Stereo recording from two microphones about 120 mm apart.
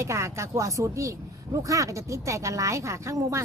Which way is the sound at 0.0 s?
25° right (ahead or behind).